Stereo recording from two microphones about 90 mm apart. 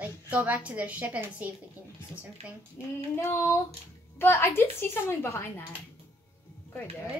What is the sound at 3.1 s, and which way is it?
A woman's voice, 30° left (ahead or behind).